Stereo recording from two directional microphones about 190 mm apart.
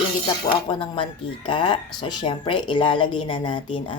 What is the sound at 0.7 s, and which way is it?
Speech, 25° left (ahead or behind).